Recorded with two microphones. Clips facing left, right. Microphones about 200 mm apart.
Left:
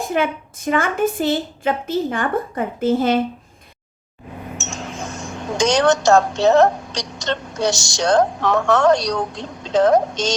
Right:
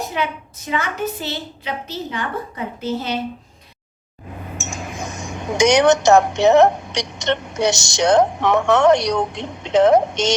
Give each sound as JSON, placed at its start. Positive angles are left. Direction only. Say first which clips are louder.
{"t": 0.0, "sound": "a woman's voice", "louder": "left 4 dB", "side_deg": 50}
{"t": 4.8, "sound": "a woman's voice", "louder": "even", "side_deg": -15}